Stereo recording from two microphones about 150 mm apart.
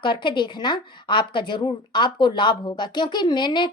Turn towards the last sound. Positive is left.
turn(degrees=30)  # may be behind; listen again after turning